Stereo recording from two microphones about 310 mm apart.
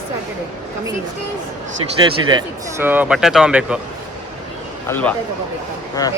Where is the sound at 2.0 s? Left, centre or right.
Centre.